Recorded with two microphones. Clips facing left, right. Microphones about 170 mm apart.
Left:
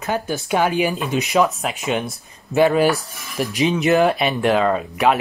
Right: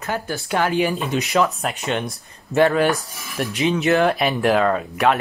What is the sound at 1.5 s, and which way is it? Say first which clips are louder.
Speech: left 1 dB; centre (ahead or behind).